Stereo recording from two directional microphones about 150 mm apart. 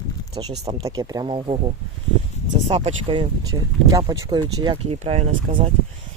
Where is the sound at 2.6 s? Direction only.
40° right (ahead or behind).